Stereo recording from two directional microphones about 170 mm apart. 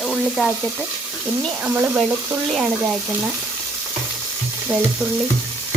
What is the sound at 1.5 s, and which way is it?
Speech, 10° right (ahead or behind).